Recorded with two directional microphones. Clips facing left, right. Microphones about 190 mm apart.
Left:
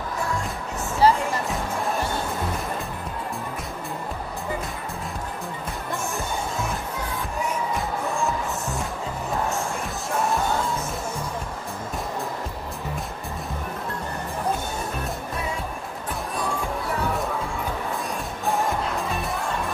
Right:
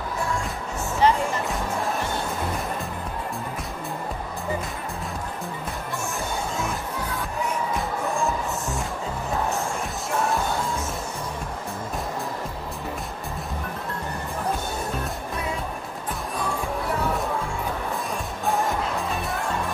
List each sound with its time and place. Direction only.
1.0 s music: 35° left (ahead or behind)